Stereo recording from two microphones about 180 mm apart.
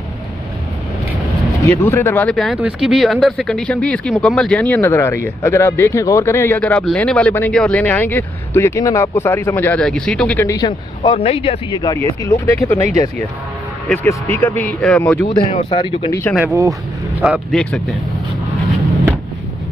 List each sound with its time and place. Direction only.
1.6 s speech: 15° left (ahead or behind)
11.0 s speech: 35° left (ahead or behind); by 15.2 s 10° left (ahead or behind)
15.7 s speech: 30° left (ahead or behind)
16.1 s speech: 15° left (ahead or behind)
17.2 s speech: centre (ahead or behind)